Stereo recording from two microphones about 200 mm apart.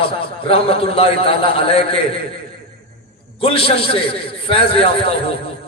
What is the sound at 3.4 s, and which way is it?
A man's voice, 25° left (ahead or behind).